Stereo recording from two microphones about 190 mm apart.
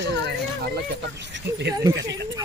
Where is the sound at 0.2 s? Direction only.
60° right (ahead or behind).